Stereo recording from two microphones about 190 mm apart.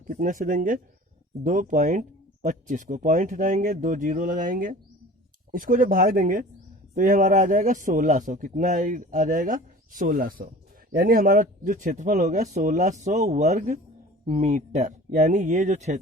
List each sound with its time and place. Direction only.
0.1 s a man's voice: 45° right (ahead or behind)